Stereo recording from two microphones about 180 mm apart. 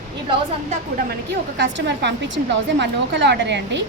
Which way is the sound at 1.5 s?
85° right.